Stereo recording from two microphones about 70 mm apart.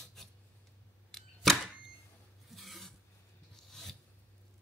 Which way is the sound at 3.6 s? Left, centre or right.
Centre.